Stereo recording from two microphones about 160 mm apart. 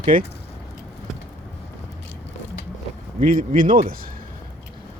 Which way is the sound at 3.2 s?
55° right (ahead or behind).